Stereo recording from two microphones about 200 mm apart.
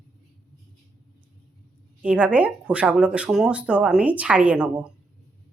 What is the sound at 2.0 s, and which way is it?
Speech, 5° right (ahead or behind).